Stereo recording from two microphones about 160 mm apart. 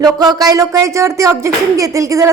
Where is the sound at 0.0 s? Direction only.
25° right (ahead or behind).